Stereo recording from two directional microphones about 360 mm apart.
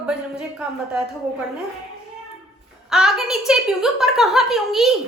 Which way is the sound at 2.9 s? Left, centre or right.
Centre.